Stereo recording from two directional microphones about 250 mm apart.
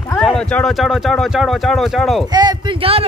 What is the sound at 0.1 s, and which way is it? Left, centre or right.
Speech, centre.